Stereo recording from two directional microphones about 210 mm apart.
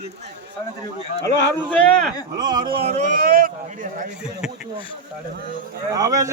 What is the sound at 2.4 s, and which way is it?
Speech, 20° right (ahead or behind).